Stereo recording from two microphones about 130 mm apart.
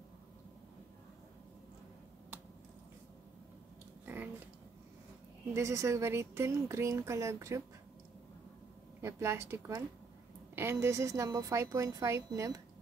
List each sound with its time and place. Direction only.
5.5 s a woman's voice: 20° right (ahead or behind)
9.0 s a woman's voice: 20° right (ahead or behind)